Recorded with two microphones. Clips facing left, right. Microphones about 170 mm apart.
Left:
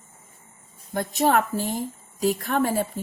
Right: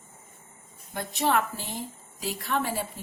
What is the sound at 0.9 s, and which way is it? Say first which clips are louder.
A woman's voice: left 5 dB; 45° left (ahead or behind).